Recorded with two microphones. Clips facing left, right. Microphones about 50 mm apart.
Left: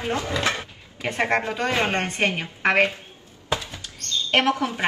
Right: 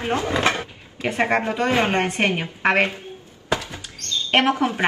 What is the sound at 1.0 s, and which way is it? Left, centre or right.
Speech, centre.